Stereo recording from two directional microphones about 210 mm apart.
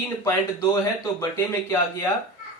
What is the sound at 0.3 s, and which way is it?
Speech, 15° left (ahead or behind).